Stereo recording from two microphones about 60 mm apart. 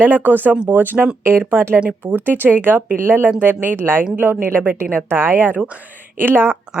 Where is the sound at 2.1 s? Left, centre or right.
Right.